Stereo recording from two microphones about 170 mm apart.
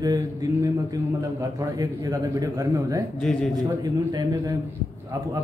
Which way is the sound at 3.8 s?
20° right (ahead or behind).